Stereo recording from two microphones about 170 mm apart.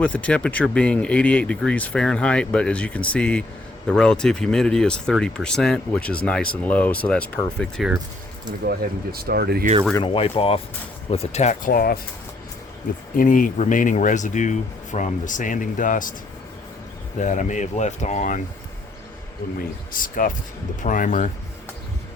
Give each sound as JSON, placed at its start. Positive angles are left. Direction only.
{"t": 0.0, "sound": "speech", "side_deg": 10}
{"t": 9.1, "sound": "speech", "side_deg": -65}
{"t": 10.0, "sound": "speech", "side_deg": 30}
{"t": 13.1, "sound": "speech", "side_deg": 50}
{"t": 17.2, "sound": "speech", "side_deg": 45}
{"t": 19.9, "sound": "speech", "side_deg": 55}